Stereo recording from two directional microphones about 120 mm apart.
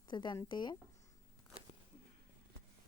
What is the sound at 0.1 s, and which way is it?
Speech, 35° left (ahead or behind).